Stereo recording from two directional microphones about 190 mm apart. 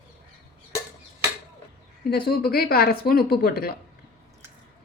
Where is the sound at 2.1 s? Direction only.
55° left (ahead or behind).